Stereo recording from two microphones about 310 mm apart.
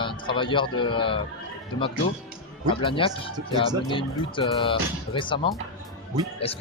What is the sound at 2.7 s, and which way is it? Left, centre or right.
A man's voice, centre.